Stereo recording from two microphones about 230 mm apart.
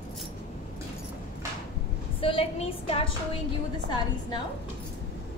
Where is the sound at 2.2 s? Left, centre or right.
Left.